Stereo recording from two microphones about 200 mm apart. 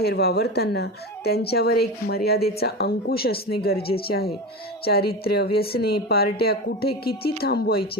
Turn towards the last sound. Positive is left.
turn(degrees=50)  # may be behind; listen again after turning